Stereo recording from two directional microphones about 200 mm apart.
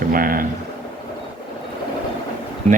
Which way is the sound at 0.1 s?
45° right (ahead or behind).